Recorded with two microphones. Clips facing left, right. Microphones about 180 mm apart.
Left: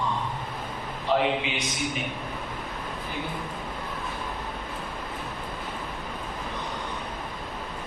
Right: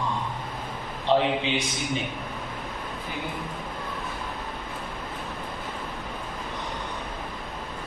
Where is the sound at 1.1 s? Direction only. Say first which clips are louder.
Right 2 dB; 30° right (ahead or behind).